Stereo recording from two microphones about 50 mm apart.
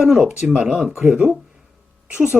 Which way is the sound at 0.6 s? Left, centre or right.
Right.